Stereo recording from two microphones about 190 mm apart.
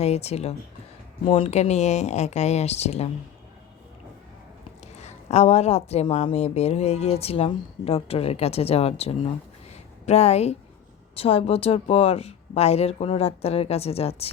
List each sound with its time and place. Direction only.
0.0 s speech: 35° left (ahead or behind)
4.9 s speech: 35° left (ahead or behind)